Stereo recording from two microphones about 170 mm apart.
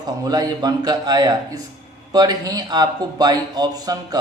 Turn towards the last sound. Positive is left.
turn(degrees=-25)  # may be behind; listen again after turning